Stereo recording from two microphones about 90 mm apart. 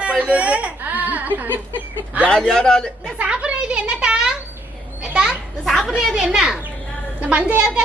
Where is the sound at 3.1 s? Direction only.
15° right (ahead or behind).